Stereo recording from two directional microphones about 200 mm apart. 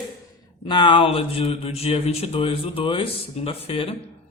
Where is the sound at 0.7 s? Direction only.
25° left (ahead or behind).